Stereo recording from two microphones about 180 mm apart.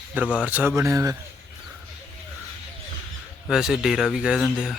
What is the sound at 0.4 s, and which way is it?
Speech, 10° right (ahead or behind).